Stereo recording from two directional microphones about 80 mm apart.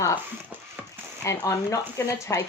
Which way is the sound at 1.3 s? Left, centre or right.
Left.